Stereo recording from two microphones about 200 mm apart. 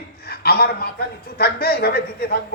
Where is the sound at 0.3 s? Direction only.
50° left (ahead or behind).